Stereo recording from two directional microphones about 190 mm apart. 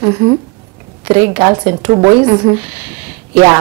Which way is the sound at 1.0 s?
10° right (ahead or behind).